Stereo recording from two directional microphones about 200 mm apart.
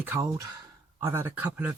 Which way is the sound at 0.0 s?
10° right (ahead or behind).